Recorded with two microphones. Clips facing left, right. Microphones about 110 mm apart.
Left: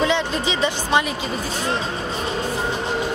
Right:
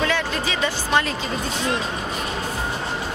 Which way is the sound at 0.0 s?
20° left (ahead or behind).